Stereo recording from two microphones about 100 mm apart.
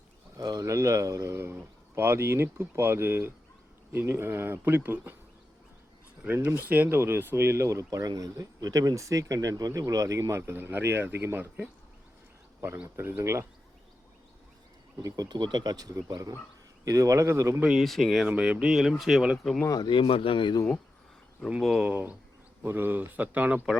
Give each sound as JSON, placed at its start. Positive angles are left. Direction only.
{"t": 0.3, "sound": "speech", "side_deg": -35}
{"t": 6.2, "sound": "speech", "side_deg": -15}
{"t": 12.6, "sound": "speech", "side_deg": -20}
{"t": 15.0, "sound": "speech", "side_deg": -40}
{"t": 17.6, "sound": "speech", "side_deg": -10}
{"t": 18.3, "sound": "speech", "side_deg": -15}
{"t": 19.6, "sound": "speech", "side_deg": 40}
{"t": 19.9, "sound": "speech", "side_deg": 65}
{"t": 21.6, "sound": "speech", "side_deg": 0}
{"t": 21.8, "sound": "speech", "side_deg": -15}